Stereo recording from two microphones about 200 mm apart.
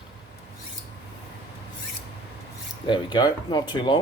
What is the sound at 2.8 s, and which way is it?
Speech, 25° left (ahead or behind).